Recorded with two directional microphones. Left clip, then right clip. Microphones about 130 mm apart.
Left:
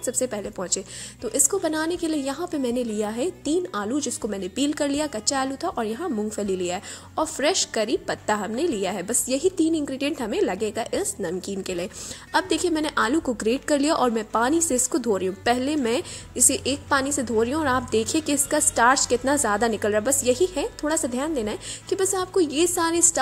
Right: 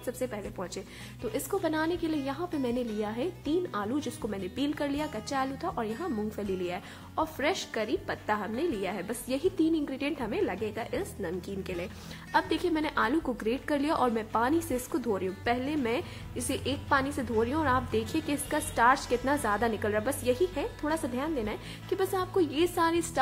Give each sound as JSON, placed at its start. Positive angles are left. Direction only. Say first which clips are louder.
{"t": 0.0, "sound": "a woman's voice", "louder": "left 8 dB", "side_deg": 50}
{"t": 1.2, "sound": "a woman's voice", "louder": "left 7 dB", "side_deg": 30}
{"t": 12.3, "sound": "a woman's voice", "louder": "left 5 dB", "side_deg": 40}
{"t": 21.9, "sound": "a woman's voice", "louder": "left 6 dB", "side_deg": 35}